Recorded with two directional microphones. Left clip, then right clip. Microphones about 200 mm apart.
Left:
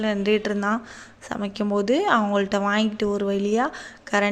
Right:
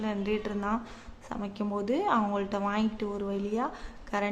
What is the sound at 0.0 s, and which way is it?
A woman's voice, 25° left (ahead or behind).